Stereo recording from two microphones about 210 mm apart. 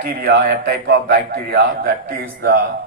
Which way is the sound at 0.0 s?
45° right (ahead or behind).